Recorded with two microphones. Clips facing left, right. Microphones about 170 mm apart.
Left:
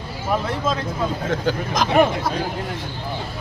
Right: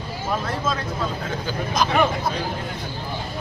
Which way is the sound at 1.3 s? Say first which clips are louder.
Left 4 dB; 90° left.